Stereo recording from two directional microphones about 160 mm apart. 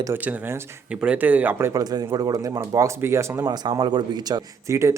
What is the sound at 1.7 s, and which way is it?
Speech, 25° right (ahead or behind).